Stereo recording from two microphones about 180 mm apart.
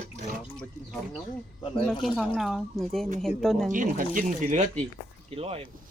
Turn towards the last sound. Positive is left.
turn(degrees=-35)  # may be behind; listen again after turning